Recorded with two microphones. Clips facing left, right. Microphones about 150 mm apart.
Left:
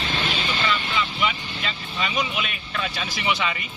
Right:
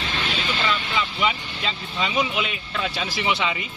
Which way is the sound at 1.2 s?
25° right (ahead or behind).